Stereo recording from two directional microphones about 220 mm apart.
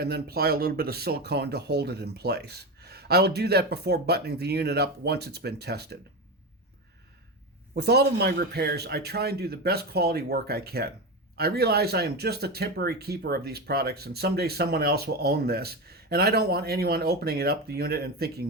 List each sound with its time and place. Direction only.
0.0 s speech: 45° right (ahead or behind)
7.8 s speech: 50° right (ahead or behind)